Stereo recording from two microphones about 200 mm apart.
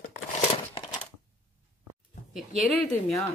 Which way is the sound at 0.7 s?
25° left (ahead or behind).